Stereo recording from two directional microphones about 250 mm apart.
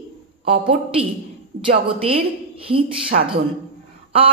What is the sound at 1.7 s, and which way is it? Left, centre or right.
A woman's voice, right.